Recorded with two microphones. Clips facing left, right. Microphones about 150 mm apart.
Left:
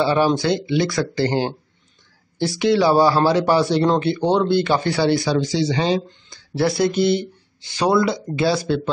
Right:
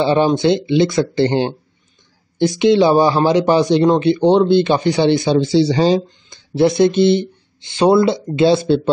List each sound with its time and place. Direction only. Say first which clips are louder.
0.0 s speech: right 4 dB; 20° right (ahead or behind)
6.3 s speech: right 6 dB; 20° right (ahead or behind)